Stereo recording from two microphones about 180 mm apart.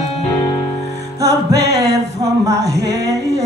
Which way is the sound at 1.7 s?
20° right (ahead or behind).